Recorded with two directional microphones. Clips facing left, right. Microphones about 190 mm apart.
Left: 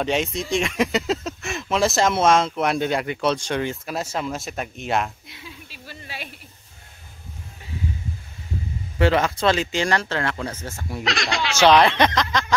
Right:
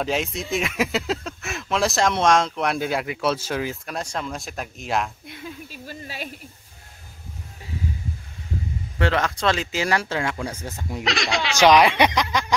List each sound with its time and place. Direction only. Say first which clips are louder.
0.0 s speech: left 2 dB; centre (ahead or behind)
5.2 s a sound: right 6 dB; 50° right (ahead or behind)
8.9 s speech: left 4 dB; 5° left (ahead or behind); by 11.1 s 15° right (ahead or behind)
11.1 s speech: right 1 dB; centre (ahead or behind)
11.6 s speech: even; 10° right (ahead or behind)